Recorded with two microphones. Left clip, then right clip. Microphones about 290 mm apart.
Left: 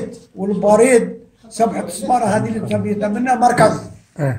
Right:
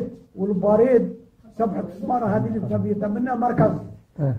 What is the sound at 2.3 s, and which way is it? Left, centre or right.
Speech, centre.